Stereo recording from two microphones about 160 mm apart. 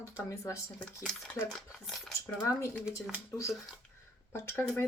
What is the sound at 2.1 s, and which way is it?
Speech, 20° left (ahead or behind).